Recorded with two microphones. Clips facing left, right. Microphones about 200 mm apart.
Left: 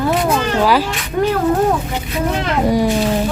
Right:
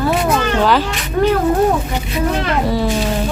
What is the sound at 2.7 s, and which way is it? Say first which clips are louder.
Speech: left 6 dB; 15° left (ahead or behind).